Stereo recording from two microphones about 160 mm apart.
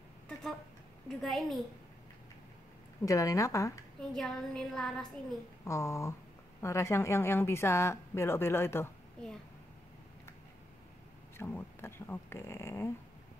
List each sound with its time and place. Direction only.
1.0 s a woman's voice: centre (ahead or behind)
3.1 s speech: 20° left (ahead or behind)
4.1 s a woman's voice: 5° left (ahead or behind)
5.7 s speech: 20° left (ahead or behind)
11.3 s speech: 15° left (ahead or behind)